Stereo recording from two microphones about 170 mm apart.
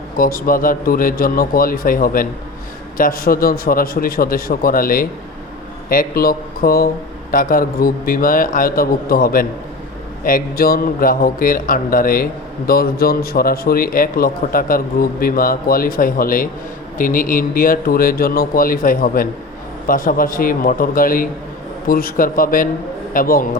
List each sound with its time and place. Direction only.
0.2 s a man's voice: 55° left (ahead or behind)